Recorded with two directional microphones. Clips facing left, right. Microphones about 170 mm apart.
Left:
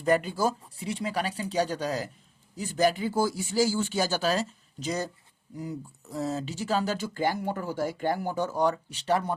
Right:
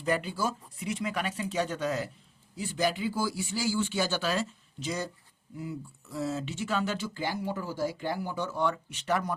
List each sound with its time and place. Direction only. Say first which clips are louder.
0.0 s speech: left 5 dB; 45° left (ahead or behind)